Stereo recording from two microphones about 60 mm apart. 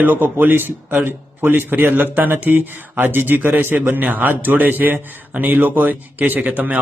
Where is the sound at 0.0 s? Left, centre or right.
Right.